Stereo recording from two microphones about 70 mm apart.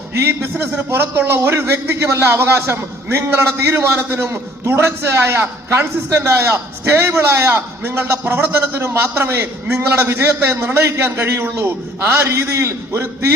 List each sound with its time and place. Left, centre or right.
0.1 s a man's voice: right